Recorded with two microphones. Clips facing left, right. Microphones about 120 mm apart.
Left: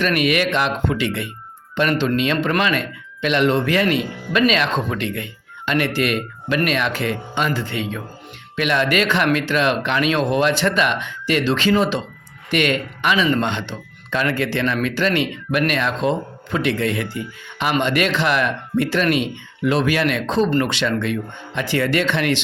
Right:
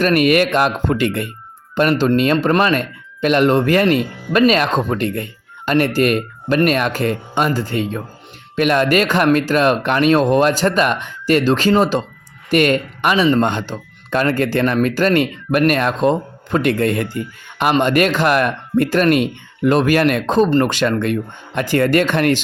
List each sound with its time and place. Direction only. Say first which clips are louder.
0.0 s speech: right 5 dB; 40° right (ahead or behind)